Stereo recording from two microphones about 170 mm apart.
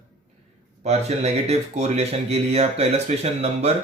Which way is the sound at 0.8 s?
40° right (ahead or behind).